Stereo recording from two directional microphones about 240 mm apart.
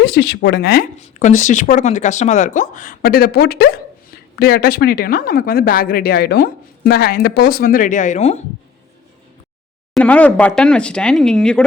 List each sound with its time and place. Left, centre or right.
0.0 s speech: left
9.9 s speech: centre